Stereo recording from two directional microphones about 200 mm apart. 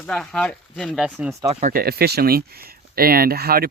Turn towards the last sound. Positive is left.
turn(degrees=-50)  # may be behind; listen again after turning